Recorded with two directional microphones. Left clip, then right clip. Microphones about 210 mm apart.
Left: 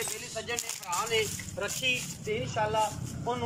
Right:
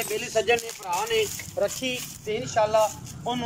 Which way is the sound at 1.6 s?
25° right (ahead or behind).